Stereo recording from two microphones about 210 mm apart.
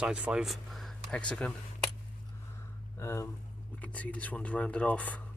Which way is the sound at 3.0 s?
15° left (ahead or behind).